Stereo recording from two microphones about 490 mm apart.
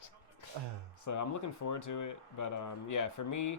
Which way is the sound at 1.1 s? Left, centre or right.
Left.